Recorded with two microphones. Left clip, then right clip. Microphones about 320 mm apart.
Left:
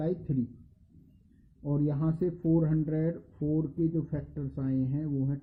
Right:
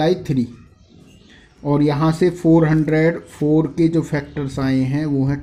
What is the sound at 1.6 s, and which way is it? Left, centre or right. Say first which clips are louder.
Speech: right 15 dB; centre.